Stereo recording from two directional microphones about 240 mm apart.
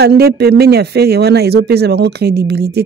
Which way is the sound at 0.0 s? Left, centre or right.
Right.